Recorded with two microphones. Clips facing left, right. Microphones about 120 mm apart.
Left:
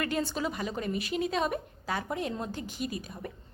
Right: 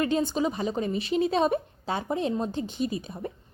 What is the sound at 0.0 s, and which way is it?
A woman's voice, 20° right (ahead or behind).